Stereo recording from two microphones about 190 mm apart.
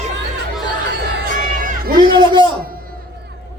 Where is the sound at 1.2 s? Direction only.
45° right (ahead or behind).